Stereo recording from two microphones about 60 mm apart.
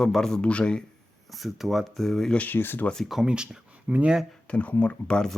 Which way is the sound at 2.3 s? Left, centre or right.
Left.